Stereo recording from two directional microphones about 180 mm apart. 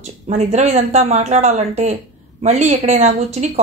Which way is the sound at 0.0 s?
40° right (ahead or behind).